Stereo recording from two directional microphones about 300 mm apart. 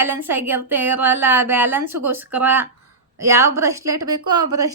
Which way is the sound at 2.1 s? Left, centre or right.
Centre.